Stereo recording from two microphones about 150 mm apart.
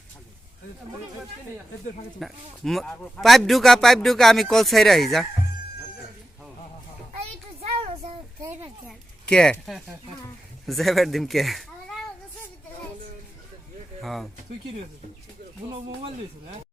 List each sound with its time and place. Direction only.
2.1 s a man's voice: centre (ahead or behind)
7.2 s child singing: 40° right (ahead or behind)
8.9 s a woman's voice: 5° left (ahead or behind)
14.0 s speech: centre (ahead or behind)